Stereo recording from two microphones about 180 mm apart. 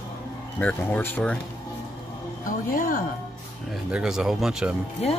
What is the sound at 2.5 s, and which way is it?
Speech, 50° left (ahead or behind).